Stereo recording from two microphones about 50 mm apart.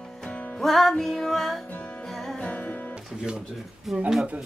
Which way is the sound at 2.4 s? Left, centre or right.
Left.